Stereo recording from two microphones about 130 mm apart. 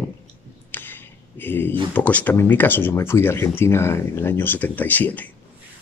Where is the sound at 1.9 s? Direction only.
10° left (ahead or behind).